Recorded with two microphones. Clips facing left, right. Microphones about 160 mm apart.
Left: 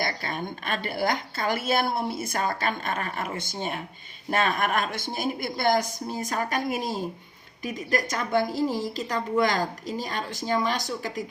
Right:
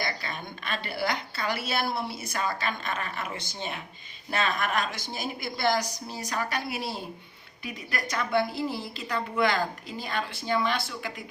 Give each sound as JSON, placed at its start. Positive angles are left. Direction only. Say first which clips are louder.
{"t": 0.0, "sound": "a woman's voice", "louder": "left 4 dB", "side_deg": 50}